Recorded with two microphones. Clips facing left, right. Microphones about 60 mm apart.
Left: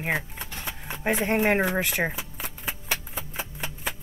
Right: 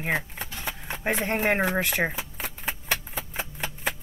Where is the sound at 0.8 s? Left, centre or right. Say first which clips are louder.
Left 2 dB; centre.